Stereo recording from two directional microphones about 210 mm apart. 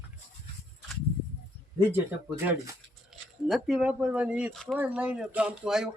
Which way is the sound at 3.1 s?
Centre (ahead or behind).